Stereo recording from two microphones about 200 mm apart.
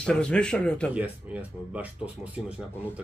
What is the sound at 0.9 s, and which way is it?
Speech, 5° right (ahead or behind).